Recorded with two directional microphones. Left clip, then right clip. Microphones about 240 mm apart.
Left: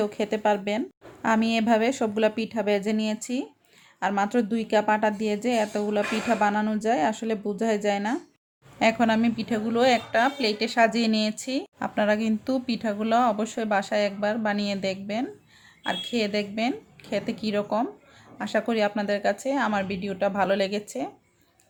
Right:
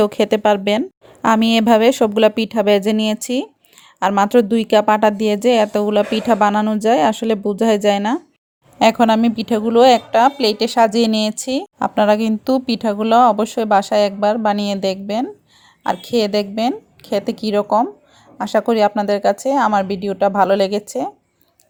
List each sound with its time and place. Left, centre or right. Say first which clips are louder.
0.0 s a woman's voice: right 10 dB; right